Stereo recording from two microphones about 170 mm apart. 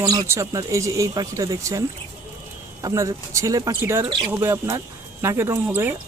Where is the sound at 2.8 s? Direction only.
20° right (ahead or behind).